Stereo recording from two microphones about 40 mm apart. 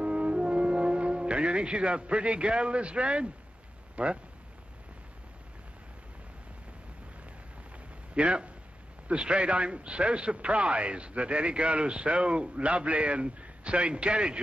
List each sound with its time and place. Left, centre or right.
0.0 s music: right
3.9 s speech: right
8.1 s a man's voice: right